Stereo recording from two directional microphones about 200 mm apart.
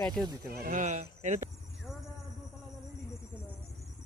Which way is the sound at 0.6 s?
40° right (ahead or behind).